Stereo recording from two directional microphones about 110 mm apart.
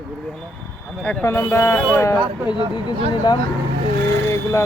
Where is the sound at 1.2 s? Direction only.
25° left (ahead or behind).